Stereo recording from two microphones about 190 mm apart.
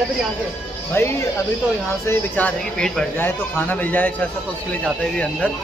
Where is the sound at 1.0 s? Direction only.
15° left (ahead or behind).